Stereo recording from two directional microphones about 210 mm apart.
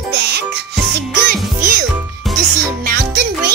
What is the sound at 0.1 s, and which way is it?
Music, 50° right (ahead or behind).